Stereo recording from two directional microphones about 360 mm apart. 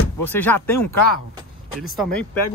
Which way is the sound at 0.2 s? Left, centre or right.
Centre.